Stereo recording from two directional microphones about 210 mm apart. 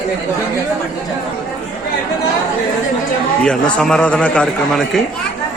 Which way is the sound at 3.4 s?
5° left (ahead or behind).